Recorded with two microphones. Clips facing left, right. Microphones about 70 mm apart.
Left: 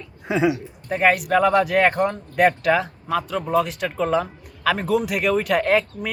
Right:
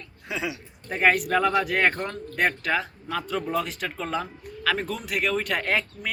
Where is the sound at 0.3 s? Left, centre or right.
Left.